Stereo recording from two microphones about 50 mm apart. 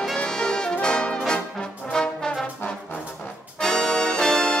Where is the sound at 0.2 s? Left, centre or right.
Centre.